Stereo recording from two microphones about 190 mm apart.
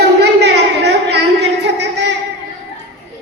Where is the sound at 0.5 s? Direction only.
65° right (ahead or behind).